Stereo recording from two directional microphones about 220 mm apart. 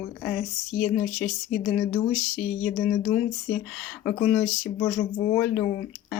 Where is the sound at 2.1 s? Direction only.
35° left (ahead or behind).